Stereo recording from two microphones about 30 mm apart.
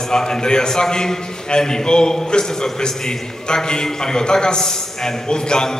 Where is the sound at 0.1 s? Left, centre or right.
Left.